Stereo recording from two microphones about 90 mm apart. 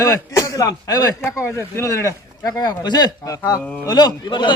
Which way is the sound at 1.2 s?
30° left (ahead or behind).